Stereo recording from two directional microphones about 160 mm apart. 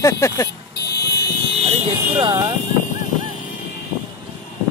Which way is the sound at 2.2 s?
30° right (ahead or behind).